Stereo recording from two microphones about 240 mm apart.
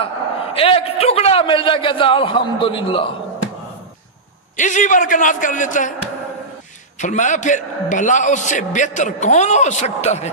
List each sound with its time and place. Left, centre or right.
0.6 s a man's voice: left
4.6 s a man's voice: left
7.0 s a man's voice: left